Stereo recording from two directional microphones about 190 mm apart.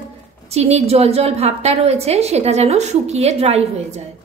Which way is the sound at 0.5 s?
35° right (ahead or behind).